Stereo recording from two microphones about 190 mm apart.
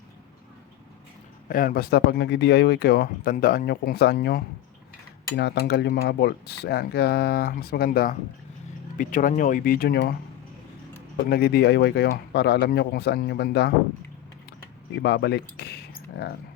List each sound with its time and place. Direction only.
1.5 s speech: 50° left (ahead or behind)
11.3 s speech: 55° left (ahead or behind)
15.0 s speech: 60° left (ahead or behind)